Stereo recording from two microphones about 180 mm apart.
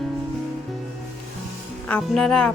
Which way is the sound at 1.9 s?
5° left (ahead or behind).